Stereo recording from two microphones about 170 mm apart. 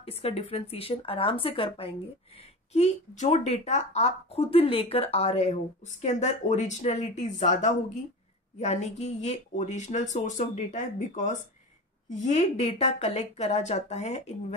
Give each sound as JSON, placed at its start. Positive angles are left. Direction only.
{"t": 0.0, "sound": "speech", "side_deg": 35}